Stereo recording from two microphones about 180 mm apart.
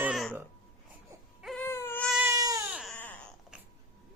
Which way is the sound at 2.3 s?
20° right (ahead or behind).